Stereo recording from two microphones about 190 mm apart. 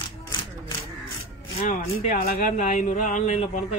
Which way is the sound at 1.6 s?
45° left (ahead or behind).